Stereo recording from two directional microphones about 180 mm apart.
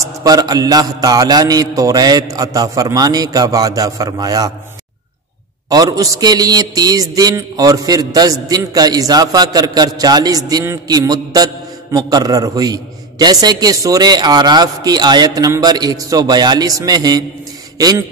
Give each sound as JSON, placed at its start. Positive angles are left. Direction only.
{"t": 0.2, "sound": "a man's voice", "side_deg": -20}
{"t": 5.7, "sound": "a man's voice", "side_deg": -20}